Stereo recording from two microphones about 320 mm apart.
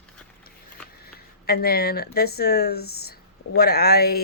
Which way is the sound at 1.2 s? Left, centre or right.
Left.